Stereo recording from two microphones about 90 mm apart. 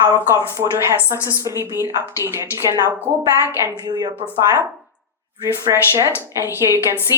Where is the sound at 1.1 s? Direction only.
35° left (ahead or behind).